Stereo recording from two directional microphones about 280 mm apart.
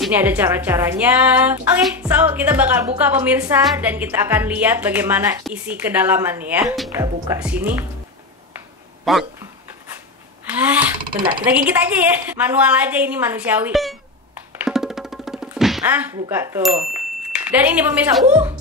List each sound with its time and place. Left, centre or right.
0.0 s a woman's voice: centre
9.1 s a woman's voice: centre
10.4 s a woman's voice: centre
14.6 s music: centre
17.3 s a woman's voice: centre